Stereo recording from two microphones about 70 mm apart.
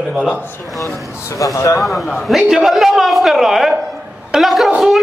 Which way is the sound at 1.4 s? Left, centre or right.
Left.